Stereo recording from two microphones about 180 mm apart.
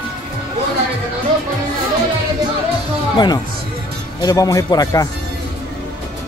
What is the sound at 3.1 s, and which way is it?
A man's voice, 25° left (ahead or behind).